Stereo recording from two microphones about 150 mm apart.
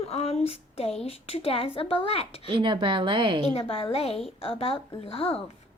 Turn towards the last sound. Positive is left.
turn(degrees=40)  # may be behind; listen again after turning